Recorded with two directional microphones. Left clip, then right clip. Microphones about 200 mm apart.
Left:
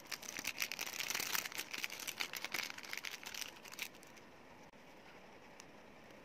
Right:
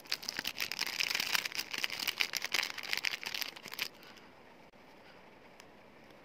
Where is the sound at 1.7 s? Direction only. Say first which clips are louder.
Right 8 dB; 15° right (ahead or behind).